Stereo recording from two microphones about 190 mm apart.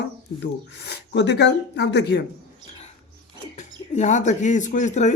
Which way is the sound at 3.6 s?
40° left (ahead or behind).